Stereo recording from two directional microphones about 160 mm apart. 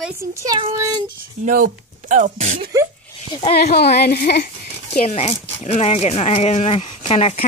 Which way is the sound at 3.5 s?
80° left.